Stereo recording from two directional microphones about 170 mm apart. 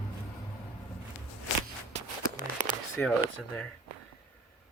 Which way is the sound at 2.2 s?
55° right (ahead or behind).